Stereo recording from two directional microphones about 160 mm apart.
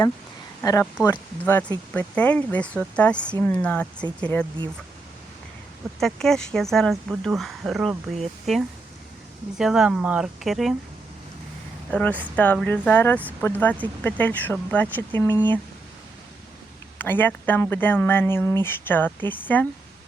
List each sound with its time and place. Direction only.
0.6 s speech: 20° left (ahead or behind)
6.0 s speech: centre (ahead or behind)
11.9 s speech: 10° left (ahead or behind)
17.0 s speech: 15° left (ahead or behind)